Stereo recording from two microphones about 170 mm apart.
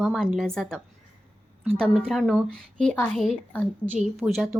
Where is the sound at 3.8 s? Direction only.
10° right (ahead or behind).